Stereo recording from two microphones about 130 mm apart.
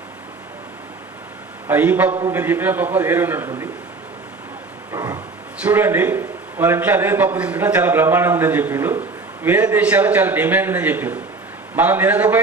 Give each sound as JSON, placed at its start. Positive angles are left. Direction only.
{"t": 1.7, "sound": "a man's voice", "side_deg": -15}
{"t": 4.9, "sound": "a sound", "side_deg": -30}
{"t": 5.6, "sound": "a man's voice", "side_deg": -15}